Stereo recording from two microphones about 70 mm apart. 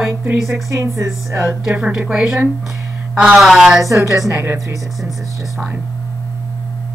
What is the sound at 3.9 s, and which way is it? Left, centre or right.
Speech, right.